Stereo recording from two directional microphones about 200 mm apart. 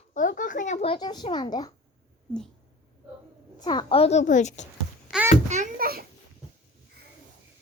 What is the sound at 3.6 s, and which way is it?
A woman's voice, 20° left (ahead or behind).